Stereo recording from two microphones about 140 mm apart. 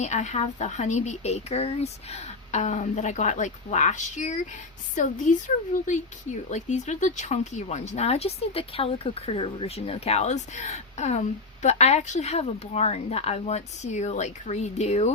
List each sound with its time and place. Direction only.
0.0 s a woman's voice: 55° left (ahead or behind)